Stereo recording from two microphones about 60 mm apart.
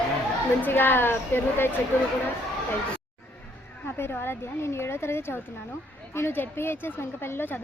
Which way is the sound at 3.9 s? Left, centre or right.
Left.